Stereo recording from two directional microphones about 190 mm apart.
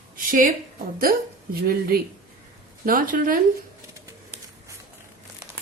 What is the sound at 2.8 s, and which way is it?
Speech, 50° right (ahead or behind).